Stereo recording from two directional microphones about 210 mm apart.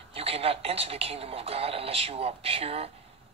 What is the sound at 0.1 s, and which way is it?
Speech, 30° right (ahead or behind).